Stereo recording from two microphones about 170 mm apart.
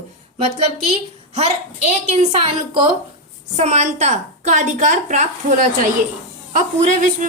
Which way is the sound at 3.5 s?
40° right (ahead or behind).